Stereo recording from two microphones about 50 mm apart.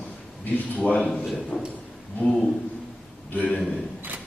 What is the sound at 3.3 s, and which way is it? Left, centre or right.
Speech, left.